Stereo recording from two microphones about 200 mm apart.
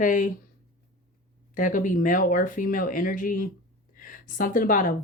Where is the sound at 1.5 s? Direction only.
40° left (ahead or behind).